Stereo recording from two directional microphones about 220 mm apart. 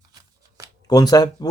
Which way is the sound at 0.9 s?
15° left (ahead or behind).